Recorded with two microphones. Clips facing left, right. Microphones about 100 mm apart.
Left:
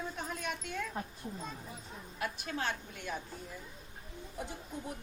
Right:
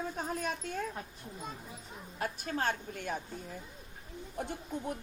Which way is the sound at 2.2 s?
40° right (ahead or behind).